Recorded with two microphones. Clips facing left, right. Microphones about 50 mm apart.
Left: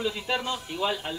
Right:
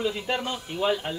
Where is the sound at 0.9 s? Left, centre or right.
Centre.